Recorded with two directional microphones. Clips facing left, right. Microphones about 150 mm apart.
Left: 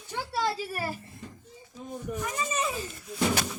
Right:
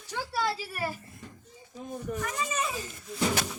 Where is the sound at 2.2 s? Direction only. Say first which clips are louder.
Left 3 dB; 15° left (ahead or behind).